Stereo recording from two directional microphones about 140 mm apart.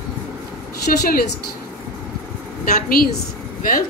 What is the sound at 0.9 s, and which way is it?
Speech, 90° left.